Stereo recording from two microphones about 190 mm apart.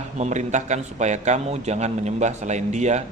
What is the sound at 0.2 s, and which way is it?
A man's voice, 40° right (ahead or behind).